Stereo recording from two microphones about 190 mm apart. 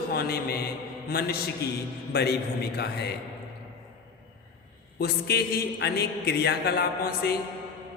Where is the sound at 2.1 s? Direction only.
55° left (ahead or behind).